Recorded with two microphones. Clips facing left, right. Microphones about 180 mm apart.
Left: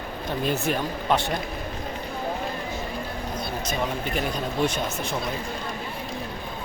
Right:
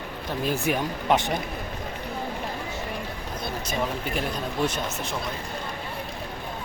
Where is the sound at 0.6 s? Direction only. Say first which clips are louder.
Even; 15° right (ahead or behind).